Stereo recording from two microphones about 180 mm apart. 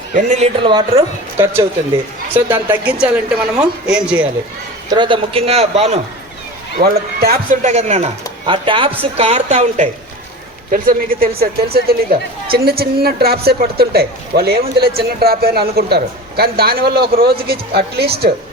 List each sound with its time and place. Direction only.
0.1 s speech: 40° right (ahead or behind)
0.7 s speech: 25° right (ahead or behind); by 4.3 s 5° right (ahead or behind)
4.9 s speech: 25° right (ahead or behind)
6.9 s a woman's voice: 60° right (ahead or behind)
7.6 s speech: 40° right (ahead or behind)
10.7 s a woman's voice: 50° right (ahead or behind)